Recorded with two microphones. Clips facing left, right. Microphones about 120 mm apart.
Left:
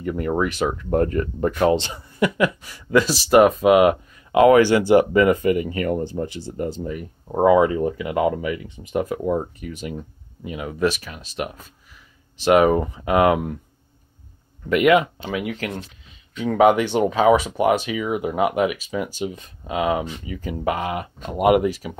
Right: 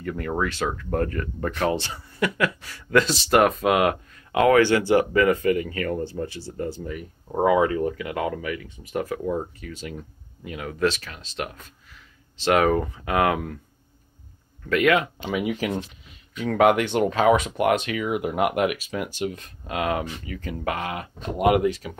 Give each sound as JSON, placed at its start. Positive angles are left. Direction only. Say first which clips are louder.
{"t": 0.0, "sound": "speech", "louder": "left 4 dB", "side_deg": 15}
{"t": 14.7, "sound": "speech", "louder": "left 4 dB", "side_deg": 15}
{"t": 15.2, "sound": "speech", "louder": "right 1 dB", "side_deg": -10}
{"t": 16.4, "sound": "speech", "louder": "left 3 dB", "side_deg": 5}